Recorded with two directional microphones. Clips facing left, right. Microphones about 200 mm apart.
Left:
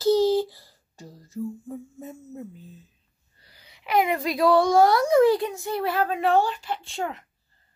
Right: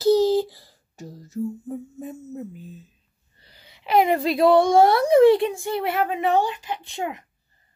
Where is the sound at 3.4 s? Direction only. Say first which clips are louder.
Right 3 dB; 25° right (ahead or behind).